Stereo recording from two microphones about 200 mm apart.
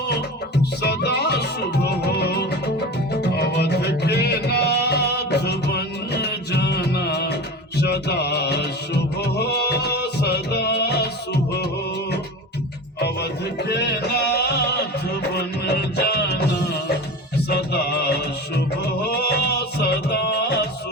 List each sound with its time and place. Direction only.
0.8 s music: 55° left (ahead or behind)
13.0 s music: 55° left (ahead or behind)